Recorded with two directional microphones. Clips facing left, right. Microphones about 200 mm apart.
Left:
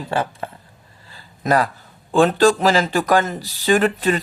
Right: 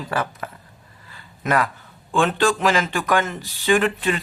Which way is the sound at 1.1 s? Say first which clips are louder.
Left 3 dB; 35° left (ahead or behind).